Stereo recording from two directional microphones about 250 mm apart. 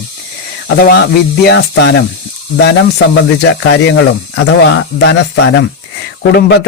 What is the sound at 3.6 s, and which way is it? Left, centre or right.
Speech, left.